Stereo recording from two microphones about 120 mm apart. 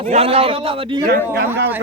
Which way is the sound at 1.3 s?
20° right (ahead or behind).